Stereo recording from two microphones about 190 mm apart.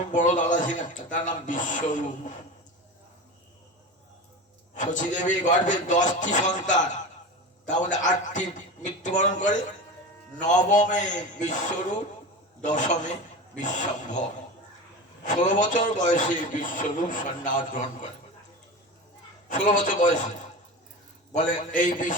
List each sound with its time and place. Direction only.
0.1 s a man's voice: 40° left (ahead or behind)
4.7 s a man's voice: 40° left (ahead or behind)
19.5 s a man's voice: 40° left (ahead or behind)
21.3 s a man's voice: 45° left (ahead or behind)